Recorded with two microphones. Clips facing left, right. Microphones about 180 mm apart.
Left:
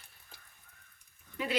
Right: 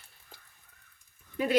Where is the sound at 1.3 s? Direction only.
45° right (ahead or behind).